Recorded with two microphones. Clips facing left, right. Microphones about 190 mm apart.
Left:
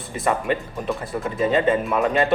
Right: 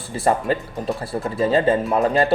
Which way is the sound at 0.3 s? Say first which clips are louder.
Right 2 dB; 35° right (ahead or behind).